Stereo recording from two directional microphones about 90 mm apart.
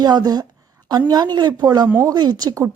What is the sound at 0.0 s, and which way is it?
A woman's voice, 50° right (ahead or behind).